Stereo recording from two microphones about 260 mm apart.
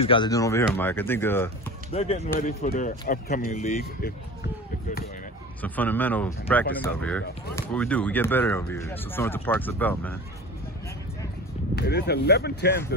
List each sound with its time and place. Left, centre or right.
0.0 s speech: centre
1.9 s speech: left
5.6 s speech: centre
11.7 s speech: left